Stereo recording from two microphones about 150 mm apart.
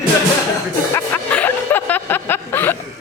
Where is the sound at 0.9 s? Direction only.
10° left (ahead or behind).